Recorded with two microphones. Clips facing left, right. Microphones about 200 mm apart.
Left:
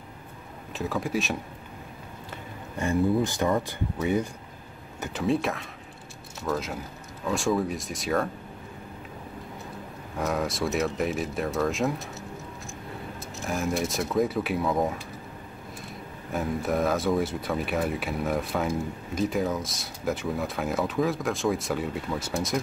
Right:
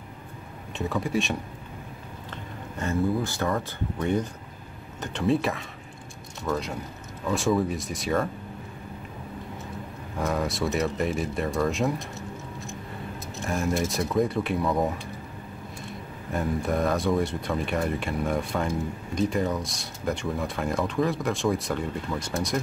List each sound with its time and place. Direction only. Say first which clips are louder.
0.7 s speech: right 1 dB; centre (ahead or behind)
2.8 s speech: left 2 dB; 15° left (ahead or behind); by 8.3 s centre (ahead or behind)
10.1 s speech: even; centre (ahead or behind)
13.4 s speech: right 1 dB; centre (ahead or behind)
16.3 s speech: right 1 dB; centre (ahead or behind)